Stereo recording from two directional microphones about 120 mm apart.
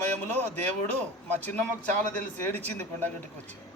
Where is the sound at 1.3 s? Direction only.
15° left (ahead or behind).